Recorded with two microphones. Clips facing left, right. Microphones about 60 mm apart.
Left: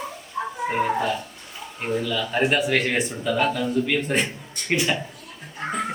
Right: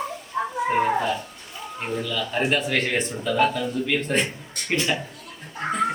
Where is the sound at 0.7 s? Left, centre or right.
Centre.